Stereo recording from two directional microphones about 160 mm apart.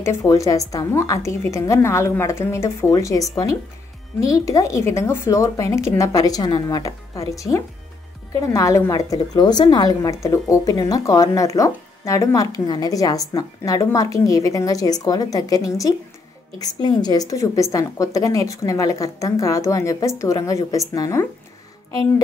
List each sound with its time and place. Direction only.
0.0 s a woman's voice: 15° left (ahead or behind)